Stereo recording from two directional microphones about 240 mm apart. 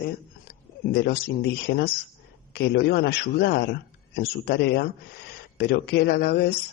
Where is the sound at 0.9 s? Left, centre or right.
Left.